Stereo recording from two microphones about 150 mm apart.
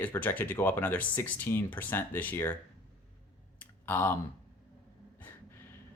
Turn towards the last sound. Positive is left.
turn(degrees=15)  # may be behind; listen again after turning